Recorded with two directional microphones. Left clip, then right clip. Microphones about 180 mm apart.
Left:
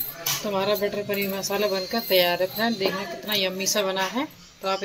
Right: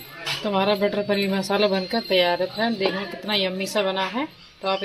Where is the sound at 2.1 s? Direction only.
5° right (ahead or behind).